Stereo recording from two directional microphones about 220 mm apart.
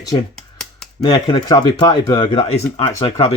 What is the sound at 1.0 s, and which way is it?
Speech, 20° left (ahead or behind).